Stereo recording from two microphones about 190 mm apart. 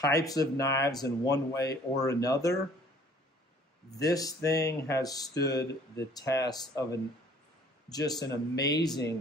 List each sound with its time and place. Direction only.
0.0 s speech: 20° left (ahead or behind)
4.0 s speech: 20° left (ahead or behind)